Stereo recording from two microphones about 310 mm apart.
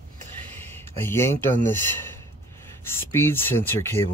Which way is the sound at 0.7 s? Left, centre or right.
Centre.